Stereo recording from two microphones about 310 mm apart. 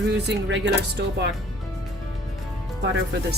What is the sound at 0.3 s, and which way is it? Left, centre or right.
A woman's voice, right.